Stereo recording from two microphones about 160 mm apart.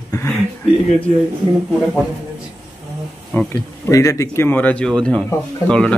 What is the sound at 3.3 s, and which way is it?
Speech, 5° left (ahead or behind).